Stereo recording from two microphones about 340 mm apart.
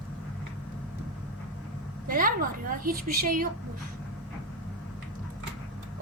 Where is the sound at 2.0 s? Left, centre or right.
Right.